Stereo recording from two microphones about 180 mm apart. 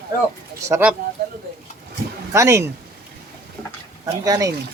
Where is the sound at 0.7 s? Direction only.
10° right (ahead or behind).